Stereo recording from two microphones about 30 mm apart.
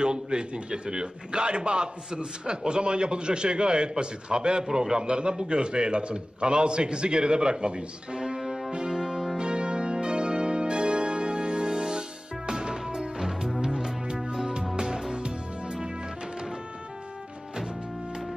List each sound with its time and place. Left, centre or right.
0.0 s a man's voice: right
8.7 s music: right
9.4 s music: right